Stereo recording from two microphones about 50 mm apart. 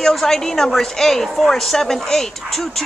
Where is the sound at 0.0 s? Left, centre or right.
Centre.